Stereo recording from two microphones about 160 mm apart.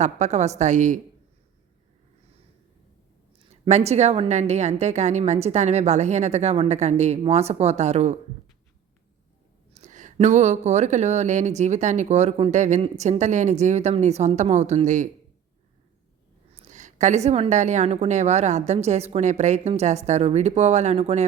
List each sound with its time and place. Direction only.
0.0 s speech: 45° right (ahead or behind)
3.4 s speech: 45° right (ahead or behind)
9.7 s speech: 50° right (ahead or behind)
16.6 s speech: 50° right (ahead or behind)